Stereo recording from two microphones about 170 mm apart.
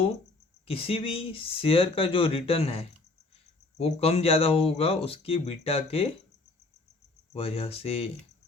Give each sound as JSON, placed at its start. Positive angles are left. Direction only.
{"t": 0.7, "sound": "speech", "side_deg": 35}
{"t": 7.3, "sound": "speech", "side_deg": 35}